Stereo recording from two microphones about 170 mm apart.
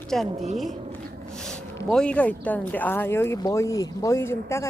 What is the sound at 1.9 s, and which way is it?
Speech, 5° left (ahead or behind).